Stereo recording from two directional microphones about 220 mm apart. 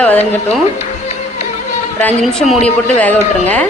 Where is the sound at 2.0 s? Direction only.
Centre (ahead or behind).